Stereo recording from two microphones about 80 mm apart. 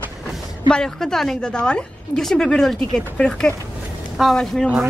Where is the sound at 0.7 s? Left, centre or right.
Centre.